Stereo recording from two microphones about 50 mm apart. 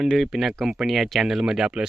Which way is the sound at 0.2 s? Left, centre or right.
Centre.